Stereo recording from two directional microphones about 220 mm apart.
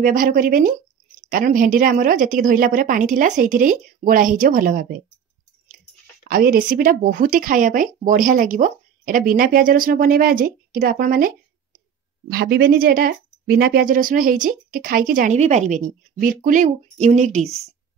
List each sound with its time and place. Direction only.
0.0 s speech: 40° right (ahead or behind)
6.2 s speech: 40° right (ahead or behind)